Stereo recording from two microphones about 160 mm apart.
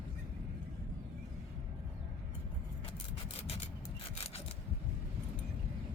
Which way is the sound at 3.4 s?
40° left (ahead or behind).